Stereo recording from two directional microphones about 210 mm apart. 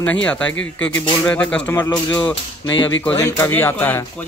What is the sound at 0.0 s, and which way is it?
Speech, 5° left (ahead or behind).